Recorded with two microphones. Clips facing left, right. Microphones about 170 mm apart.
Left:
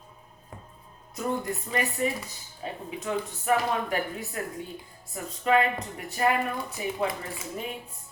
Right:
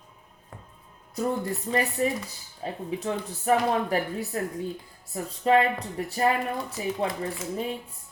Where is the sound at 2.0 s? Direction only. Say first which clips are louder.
Right 2 dB; 35° right (ahead or behind).